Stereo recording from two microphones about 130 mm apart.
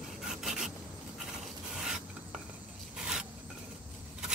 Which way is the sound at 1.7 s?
5° right (ahead or behind).